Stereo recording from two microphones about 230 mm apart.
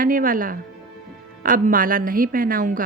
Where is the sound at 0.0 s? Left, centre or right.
Right.